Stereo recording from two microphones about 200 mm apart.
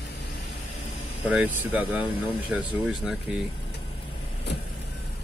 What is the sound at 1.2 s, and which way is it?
Speech, 5° right (ahead or behind).